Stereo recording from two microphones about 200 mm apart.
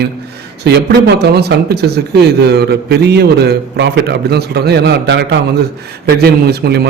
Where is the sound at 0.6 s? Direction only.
55° right (ahead or behind).